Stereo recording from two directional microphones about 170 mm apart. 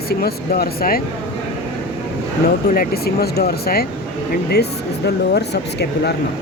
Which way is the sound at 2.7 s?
60° left (ahead or behind).